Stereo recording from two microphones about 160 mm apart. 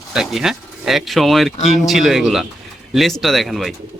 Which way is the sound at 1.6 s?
45° left (ahead or behind).